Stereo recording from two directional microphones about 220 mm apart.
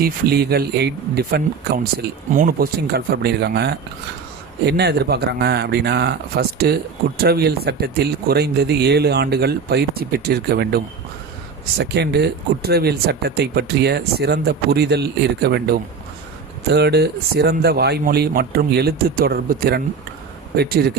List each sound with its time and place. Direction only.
0.0 s speech: 45° right (ahead or behind)